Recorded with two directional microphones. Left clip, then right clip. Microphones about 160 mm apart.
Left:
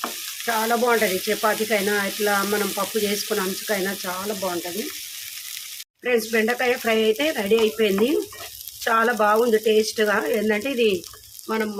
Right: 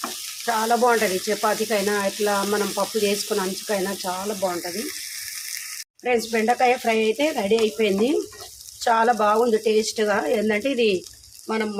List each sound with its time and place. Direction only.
0.4 s frying: centre (ahead or behind)
6.1 s speech: 5° right (ahead or behind)
11.4 s frying: 20° right (ahead or behind)